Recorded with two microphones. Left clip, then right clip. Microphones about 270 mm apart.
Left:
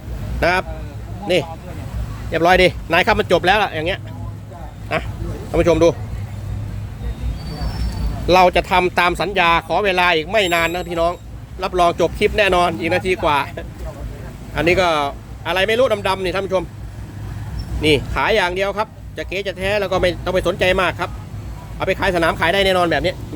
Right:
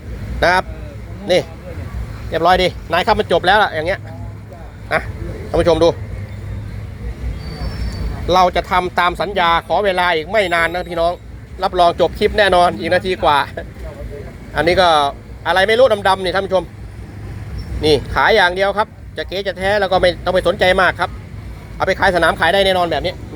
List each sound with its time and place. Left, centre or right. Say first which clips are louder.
0.3 s speech: right 3 dB; centre
2.3 s speech: even; centre
5.5 s speech: right 1 dB; centre
8.3 s speech: even; left
18.1 s speech: right 5 dB; centre